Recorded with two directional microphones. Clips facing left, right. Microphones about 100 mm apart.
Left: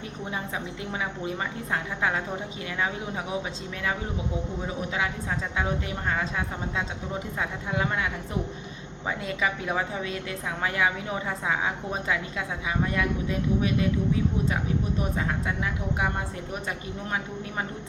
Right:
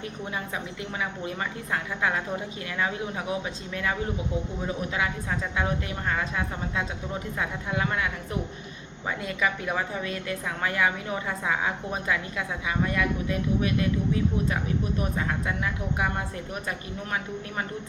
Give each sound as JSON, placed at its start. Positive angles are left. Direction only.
{"t": 1.7, "sound": "a woman's voice", "side_deg": 20}
{"t": 6.1, "sound": "a woman's voice", "side_deg": 25}
{"t": 9.0, "sound": "a woman's voice", "side_deg": 25}
{"t": 15.3, "sound": "a woman's voice", "side_deg": 20}